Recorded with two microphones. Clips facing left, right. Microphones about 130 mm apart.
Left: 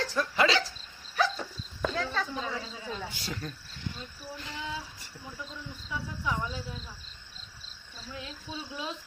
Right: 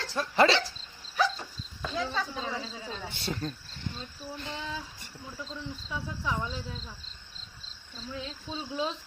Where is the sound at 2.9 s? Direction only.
25° right (ahead or behind).